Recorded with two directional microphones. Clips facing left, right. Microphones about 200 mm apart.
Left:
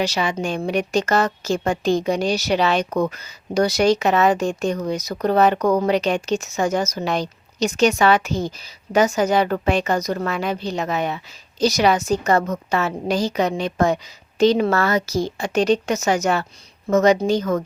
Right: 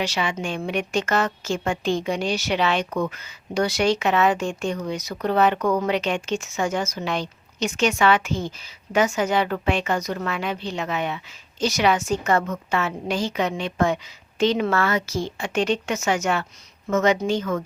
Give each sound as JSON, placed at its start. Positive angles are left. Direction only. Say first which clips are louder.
{"t": 0.0, "sound": "a woman's voice", "louder": "left 4 dB", "side_deg": 40}